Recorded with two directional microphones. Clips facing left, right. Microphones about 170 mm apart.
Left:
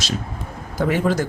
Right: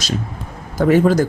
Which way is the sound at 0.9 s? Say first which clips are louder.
Right 7 dB; 40° right (ahead or behind).